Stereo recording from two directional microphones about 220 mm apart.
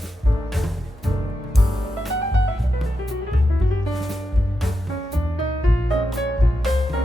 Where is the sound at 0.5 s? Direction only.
Centre (ahead or behind).